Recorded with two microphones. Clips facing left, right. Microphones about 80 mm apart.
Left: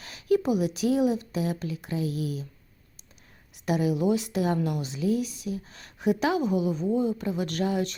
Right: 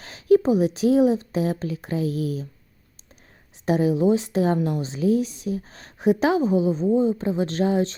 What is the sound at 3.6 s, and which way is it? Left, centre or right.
A woman's voice, right.